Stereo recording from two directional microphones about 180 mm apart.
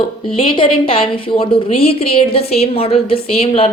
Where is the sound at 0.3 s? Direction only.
30° left (ahead or behind).